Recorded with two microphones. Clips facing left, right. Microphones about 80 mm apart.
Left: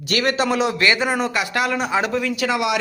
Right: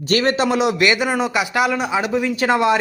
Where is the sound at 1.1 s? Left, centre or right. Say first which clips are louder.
Right 2 dB; centre.